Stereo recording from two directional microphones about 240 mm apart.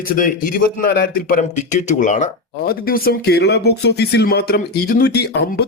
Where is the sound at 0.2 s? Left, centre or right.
Left.